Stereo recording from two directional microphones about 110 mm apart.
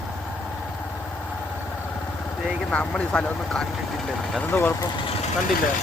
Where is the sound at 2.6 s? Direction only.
10° left (ahead or behind).